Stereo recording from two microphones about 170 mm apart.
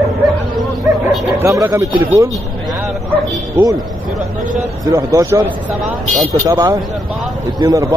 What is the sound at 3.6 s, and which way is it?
Speech, 10° right (ahead or behind).